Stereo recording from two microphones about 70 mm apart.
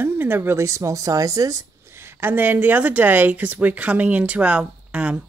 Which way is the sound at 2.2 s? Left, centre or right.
Right.